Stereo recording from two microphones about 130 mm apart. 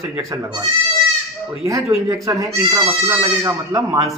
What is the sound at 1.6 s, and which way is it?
A man's voice, 25° right (ahead or behind).